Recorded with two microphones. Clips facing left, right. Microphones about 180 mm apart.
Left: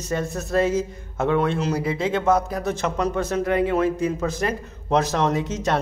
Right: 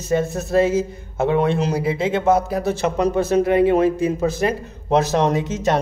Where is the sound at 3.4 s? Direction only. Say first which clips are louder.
Right 4 dB; 25° right (ahead or behind).